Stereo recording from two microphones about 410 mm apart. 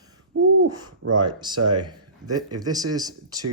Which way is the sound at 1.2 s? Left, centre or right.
Centre.